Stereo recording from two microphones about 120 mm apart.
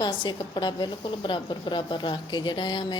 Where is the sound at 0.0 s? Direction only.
40° left (ahead or behind).